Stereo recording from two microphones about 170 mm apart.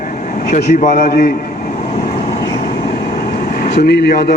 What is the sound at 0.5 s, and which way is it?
Speech, 45° left (ahead or behind).